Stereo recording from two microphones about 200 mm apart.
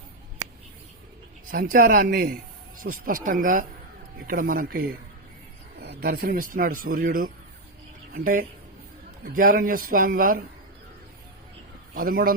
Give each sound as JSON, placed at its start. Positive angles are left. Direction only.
{"t": 1.5, "sound": "a man's voice", "side_deg": -40}
{"t": 11.9, "sound": "a man's voice", "side_deg": -45}